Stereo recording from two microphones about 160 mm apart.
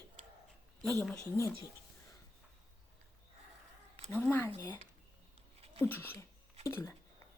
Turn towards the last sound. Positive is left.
turn(degrees=20)  # may be behind; listen again after turning